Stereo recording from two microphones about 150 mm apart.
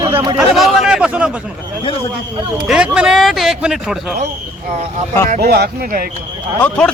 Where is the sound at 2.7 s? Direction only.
5° right (ahead or behind).